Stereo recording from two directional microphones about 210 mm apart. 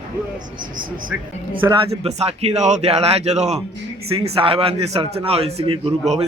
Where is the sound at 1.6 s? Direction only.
15° right (ahead or behind).